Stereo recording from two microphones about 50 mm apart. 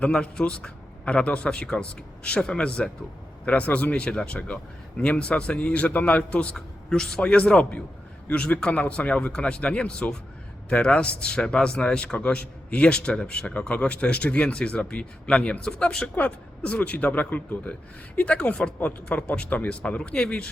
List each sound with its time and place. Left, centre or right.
0.0 s a man's voice: centre
3.4 s a man's voice: left
3.9 s a man's voice: centre